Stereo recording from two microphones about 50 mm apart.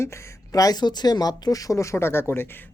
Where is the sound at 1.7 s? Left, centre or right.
Left.